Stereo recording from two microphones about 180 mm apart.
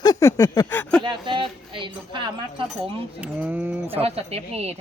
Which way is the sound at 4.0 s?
35° right (ahead or behind).